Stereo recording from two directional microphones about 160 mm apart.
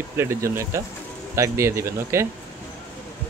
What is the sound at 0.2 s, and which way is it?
Speech, 15° right (ahead or behind).